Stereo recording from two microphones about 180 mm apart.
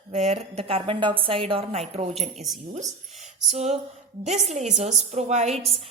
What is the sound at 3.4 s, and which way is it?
A woman's voice, 35° right (ahead or behind).